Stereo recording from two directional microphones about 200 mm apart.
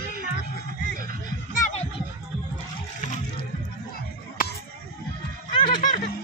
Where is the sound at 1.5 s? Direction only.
35° left (ahead or behind).